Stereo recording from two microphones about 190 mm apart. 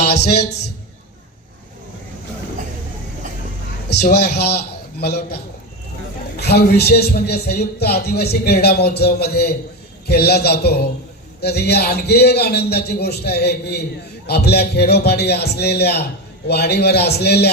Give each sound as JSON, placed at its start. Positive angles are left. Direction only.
{"t": 0.0, "sound": "a sound", "side_deg": 60}
{"t": 4.1, "sound": "a man's voice", "side_deg": 60}
{"t": 6.4, "sound": "speech", "side_deg": 60}